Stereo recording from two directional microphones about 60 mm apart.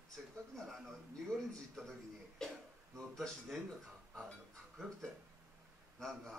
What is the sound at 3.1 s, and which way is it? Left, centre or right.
Speech, centre.